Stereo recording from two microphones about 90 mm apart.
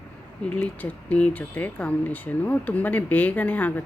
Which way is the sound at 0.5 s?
15° left (ahead or behind).